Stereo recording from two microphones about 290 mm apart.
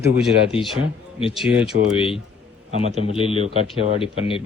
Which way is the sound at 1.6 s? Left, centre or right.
Centre.